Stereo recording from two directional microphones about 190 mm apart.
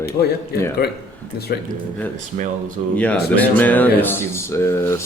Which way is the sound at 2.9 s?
5° left (ahead or behind).